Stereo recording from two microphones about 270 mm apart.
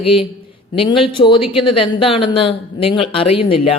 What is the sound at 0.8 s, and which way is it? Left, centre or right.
Speech, centre.